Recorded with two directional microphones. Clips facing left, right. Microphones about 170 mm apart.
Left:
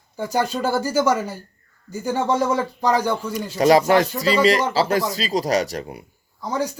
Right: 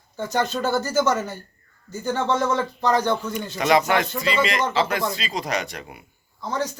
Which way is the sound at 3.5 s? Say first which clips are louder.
Left 5 dB; 35° left (ahead or behind).